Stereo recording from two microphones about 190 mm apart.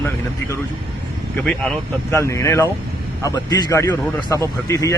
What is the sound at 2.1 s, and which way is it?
A man's voice, 15° left (ahead or behind).